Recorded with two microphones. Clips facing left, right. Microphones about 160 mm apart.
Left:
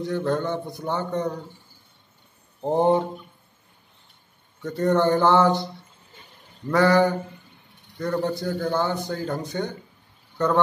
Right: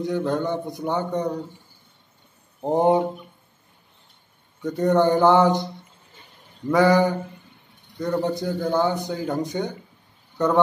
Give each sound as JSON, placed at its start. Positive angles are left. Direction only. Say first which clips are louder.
{"t": 0.0, "sound": "a man's voice", "louder": "right 1 dB", "side_deg": -15}
{"t": 2.6, "sound": "a man's voice", "louder": "right 1 dB", "side_deg": -15}
{"t": 4.6, "sound": "a man's voice", "louder": "right 2 dB", "side_deg": -15}
{"t": 6.7, "sound": "a man's voice", "louder": "right 1 dB", "side_deg": -15}